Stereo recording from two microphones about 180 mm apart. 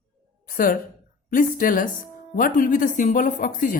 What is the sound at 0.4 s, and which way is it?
A woman's voice, 50° left (ahead or behind).